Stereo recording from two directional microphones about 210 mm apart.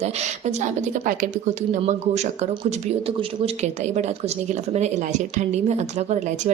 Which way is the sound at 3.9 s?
35° right (ahead or behind).